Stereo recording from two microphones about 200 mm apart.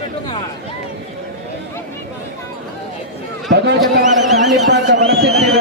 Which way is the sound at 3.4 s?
60° right (ahead or behind).